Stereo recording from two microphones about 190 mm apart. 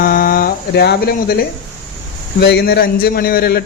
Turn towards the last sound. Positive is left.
turn(degrees=55)  # may be behind; listen again after turning